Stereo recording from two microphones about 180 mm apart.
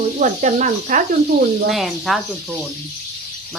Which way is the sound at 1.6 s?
Centre (ahead or behind).